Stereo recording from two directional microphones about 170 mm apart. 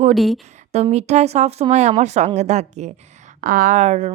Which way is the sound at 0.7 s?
40° right (ahead or behind).